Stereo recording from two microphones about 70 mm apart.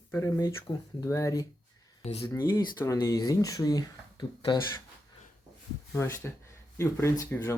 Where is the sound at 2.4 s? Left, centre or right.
Left.